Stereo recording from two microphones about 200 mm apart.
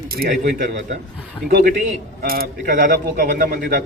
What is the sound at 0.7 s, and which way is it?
Speech, 60° right (ahead or behind).